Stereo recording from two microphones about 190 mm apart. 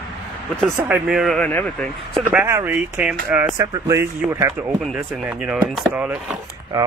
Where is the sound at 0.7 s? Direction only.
10° right (ahead or behind); by 2.2 s 5° left (ahead or behind).